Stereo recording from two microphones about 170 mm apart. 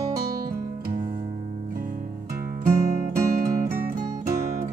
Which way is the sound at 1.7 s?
55° right (ahead or behind).